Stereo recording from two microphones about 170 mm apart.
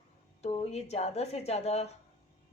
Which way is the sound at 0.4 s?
40° left (ahead or behind).